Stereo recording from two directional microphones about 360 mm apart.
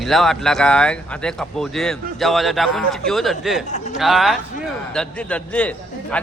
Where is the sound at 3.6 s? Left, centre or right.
Centre.